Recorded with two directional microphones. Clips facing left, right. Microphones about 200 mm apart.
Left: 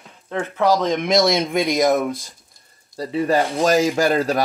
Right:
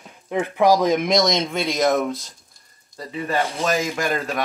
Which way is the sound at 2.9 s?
30° left (ahead or behind).